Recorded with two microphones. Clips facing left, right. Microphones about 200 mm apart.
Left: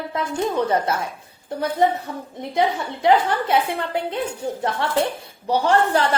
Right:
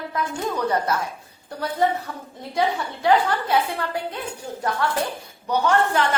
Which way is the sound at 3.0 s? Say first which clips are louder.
Left 2 dB; 20° left (ahead or behind).